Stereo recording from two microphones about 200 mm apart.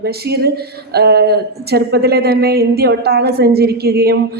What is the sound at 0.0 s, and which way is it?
Speech, 55° right (ahead or behind).